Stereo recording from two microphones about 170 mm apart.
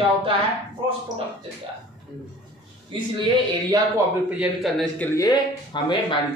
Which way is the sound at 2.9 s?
30° right (ahead or behind).